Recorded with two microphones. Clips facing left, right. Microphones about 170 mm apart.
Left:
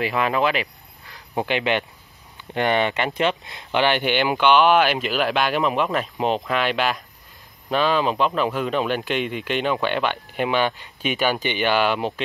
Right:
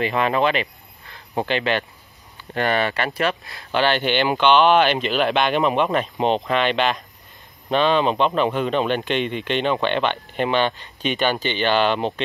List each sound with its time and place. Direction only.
0.0 s speech: 5° left (ahead or behind)